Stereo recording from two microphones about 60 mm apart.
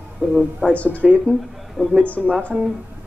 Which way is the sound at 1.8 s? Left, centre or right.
Centre.